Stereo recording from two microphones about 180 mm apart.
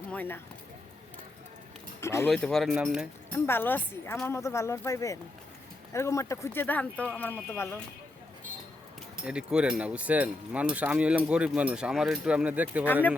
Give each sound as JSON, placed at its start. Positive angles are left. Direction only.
{"t": 0.1, "sound": "speech", "side_deg": 10}
{"t": 2.0, "sound": "speech", "side_deg": 15}
{"t": 2.3, "sound": "speech", "side_deg": 0}
{"t": 3.3, "sound": "speech", "side_deg": 10}
{"t": 9.2, "sound": "speech", "side_deg": -5}